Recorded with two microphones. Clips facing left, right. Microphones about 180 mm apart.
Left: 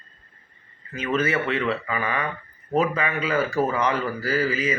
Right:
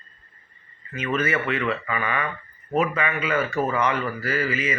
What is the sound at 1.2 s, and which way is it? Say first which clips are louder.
Speech: left 1 dB; 30° left (ahead or behind).